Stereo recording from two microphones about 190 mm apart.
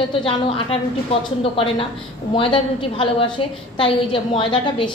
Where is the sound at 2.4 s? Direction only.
30° left (ahead or behind).